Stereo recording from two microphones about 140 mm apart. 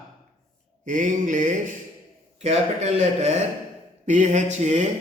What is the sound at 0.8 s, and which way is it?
Mantra, 65° right (ahead or behind).